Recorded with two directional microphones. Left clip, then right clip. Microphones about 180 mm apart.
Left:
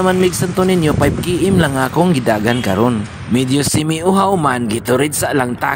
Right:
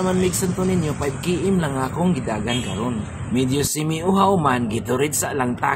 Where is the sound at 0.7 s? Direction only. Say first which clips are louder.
Left 9 dB; 45° left (ahead or behind).